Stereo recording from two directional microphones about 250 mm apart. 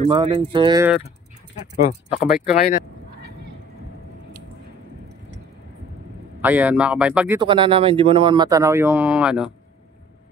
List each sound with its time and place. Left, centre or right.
0.0 s speech: right
1.9 s speech: left
6.4 s speech: centre
7.3 s speech: centre